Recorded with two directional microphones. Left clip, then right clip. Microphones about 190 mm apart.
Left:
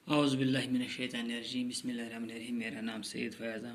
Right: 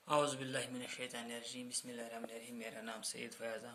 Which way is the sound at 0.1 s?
50° right (ahead or behind).